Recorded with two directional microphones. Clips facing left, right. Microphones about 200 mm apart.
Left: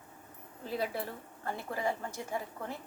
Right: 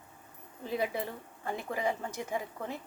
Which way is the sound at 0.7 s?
15° right (ahead or behind).